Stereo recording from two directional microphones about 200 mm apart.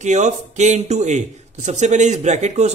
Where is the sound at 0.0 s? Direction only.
35° right (ahead or behind).